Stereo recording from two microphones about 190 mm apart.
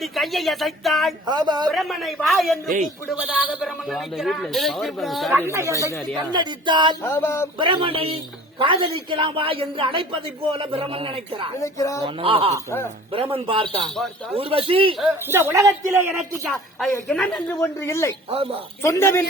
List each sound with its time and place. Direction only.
0.0 s speech: centre (ahead or behind)
1.3 s a woman's voice: 20° right (ahead or behind)
1.7 s speech: centre (ahead or behind)
5.3 s a woman's voice: 15° right (ahead or behind)
7.0 s speech: 10° left (ahead or behind)
7.6 s a woman's voice: 25° right (ahead or behind)
11.6 s speech: 15° left (ahead or behind)
12.0 s a woman's voice: 30° right (ahead or behind)
14.9 s a woman's voice: 10° right (ahead or behind)
16.9 s speech: 10° left (ahead or behind)
18.3 s a woman's voice: 30° right (ahead or behind)
18.8 s speech: 15° left (ahead or behind)